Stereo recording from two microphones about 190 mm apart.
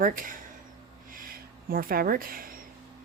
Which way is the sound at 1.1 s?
50° right (ahead or behind).